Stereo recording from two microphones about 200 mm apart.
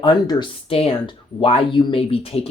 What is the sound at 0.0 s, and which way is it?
Speech, 20° left (ahead or behind).